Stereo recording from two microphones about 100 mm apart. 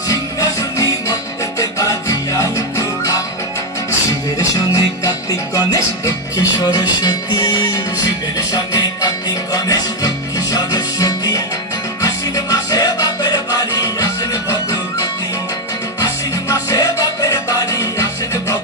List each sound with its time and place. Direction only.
0.1 s music: 35° left (ahead or behind)
4.4 s music: 35° left (ahead or behind)